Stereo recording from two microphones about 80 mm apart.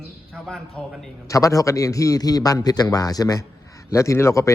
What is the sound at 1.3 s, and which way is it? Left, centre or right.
A man's voice, left.